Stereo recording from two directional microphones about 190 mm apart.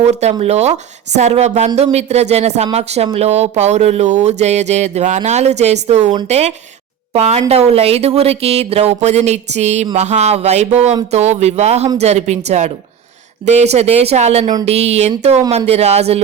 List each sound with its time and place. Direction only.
0.0 s speech: 35° right (ahead or behind)